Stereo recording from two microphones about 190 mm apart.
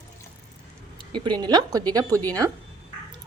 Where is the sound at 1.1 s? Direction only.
25° right (ahead or behind).